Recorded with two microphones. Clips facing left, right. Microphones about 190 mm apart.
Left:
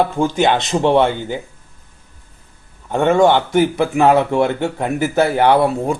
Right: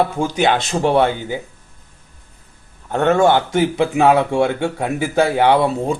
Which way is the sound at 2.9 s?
10° left (ahead or behind).